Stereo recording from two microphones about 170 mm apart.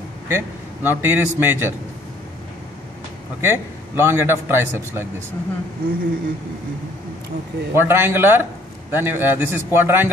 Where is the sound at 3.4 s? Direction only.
15° right (ahead or behind).